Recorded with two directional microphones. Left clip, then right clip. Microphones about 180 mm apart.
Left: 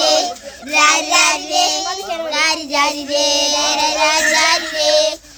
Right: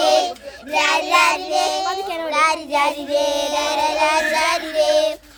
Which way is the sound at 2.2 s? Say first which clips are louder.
Even; 15° left (ahead or behind).